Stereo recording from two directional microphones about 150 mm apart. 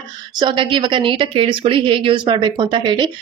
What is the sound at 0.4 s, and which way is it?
A woman's voice, 35° right (ahead or behind).